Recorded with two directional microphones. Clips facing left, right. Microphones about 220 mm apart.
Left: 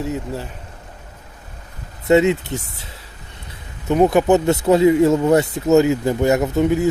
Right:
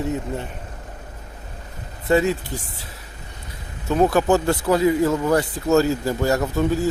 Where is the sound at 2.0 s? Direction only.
20° left (ahead or behind).